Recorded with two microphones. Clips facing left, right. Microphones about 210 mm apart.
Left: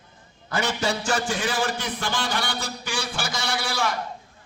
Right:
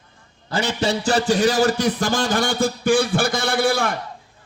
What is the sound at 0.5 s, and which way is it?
A man's voice, 30° right (ahead or behind).